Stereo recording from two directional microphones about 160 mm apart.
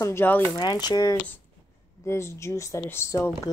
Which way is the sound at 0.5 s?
25° left (ahead or behind).